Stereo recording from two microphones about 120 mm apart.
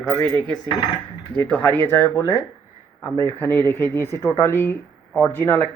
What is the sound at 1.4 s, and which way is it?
Speech, 15° left (ahead or behind).